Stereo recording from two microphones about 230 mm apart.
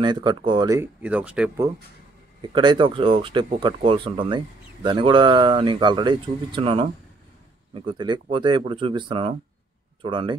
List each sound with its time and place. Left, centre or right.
0.0 s speech: centre
2.4 s speech: centre